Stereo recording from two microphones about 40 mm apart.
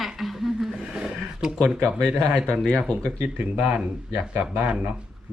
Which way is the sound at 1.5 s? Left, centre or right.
Left.